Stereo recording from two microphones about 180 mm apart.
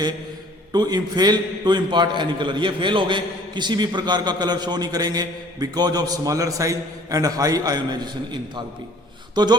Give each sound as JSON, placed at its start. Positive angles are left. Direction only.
{"t": 0.7, "sound": "a man's voice", "side_deg": -20}